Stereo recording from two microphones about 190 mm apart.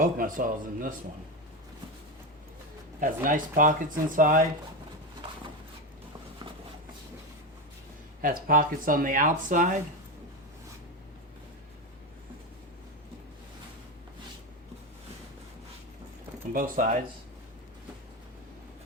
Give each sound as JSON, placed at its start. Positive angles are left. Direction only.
{"t": 0.0, "sound": "speech", "side_deg": -45}
{"t": 3.0, "sound": "speech", "side_deg": -45}
{"t": 8.2, "sound": "speech", "side_deg": -45}
{"t": 16.5, "sound": "speech", "side_deg": -45}